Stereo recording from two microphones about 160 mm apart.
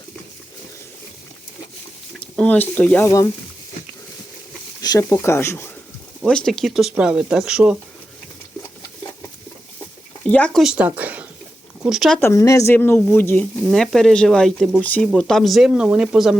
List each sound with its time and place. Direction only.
2.1 s speech: 5° left (ahead or behind)
4.8 s speech: 20° left (ahead or behind)
6.2 s speech: 5° left (ahead or behind)
10.2 s speech: 5° left (ahead or behind)
12.2 s speech: 20° left (ahead or behind)
13.7 s speech: centre (ahead or behind)